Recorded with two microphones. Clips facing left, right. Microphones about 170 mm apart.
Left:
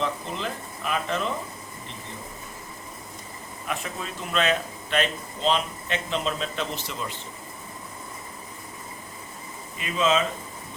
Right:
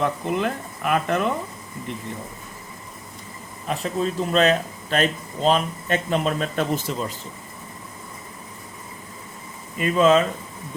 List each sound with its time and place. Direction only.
0.0 s speech: 60° right (ahead or behind)
3.7 s speech: 35° right (ahead or behind)
9.7 s speech: 50° right (ahead or behind)